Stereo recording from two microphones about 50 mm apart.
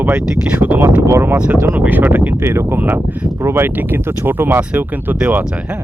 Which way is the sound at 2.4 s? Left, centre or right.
Right.